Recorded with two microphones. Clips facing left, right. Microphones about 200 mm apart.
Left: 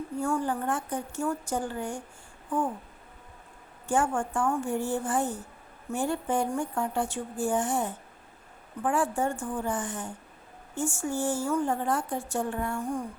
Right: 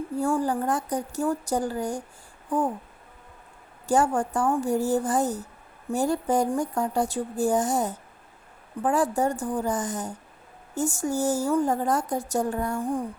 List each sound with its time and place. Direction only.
0.2 s a woman's voice: 35° right (ahead or behind)
3.8 s a woman's voice: 40° right (ahead or behind)